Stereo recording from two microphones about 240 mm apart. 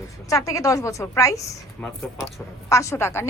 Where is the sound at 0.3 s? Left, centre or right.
Centre.